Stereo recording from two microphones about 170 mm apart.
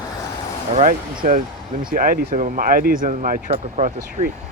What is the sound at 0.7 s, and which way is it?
Speech, 50° right (ahead or behind).